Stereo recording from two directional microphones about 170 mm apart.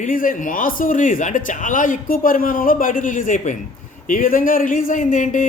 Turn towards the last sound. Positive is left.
turn(degrees=50)  # may be behind; listen again after turning